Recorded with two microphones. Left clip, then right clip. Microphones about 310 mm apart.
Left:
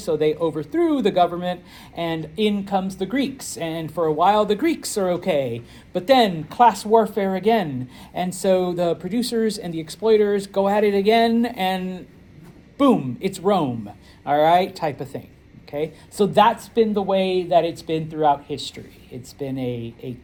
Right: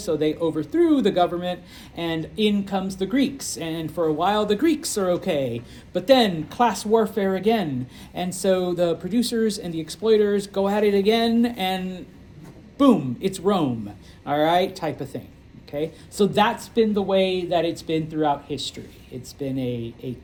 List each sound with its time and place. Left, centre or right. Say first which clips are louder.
0.0 s speech: left 2 dB; left